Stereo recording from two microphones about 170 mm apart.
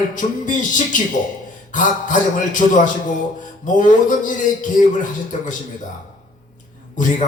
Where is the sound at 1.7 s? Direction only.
50° left (ahead or behind).